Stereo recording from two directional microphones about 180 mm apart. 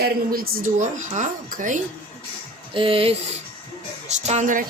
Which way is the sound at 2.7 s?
30° right (ahead or behind).